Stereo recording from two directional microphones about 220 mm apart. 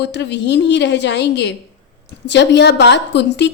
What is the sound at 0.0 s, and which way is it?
Speech, 50° left (ahead or behind).